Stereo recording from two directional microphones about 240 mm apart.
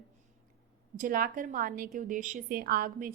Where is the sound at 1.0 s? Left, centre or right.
Right.